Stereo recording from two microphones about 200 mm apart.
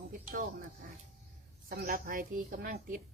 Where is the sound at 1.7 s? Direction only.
45° right (ahead or behind).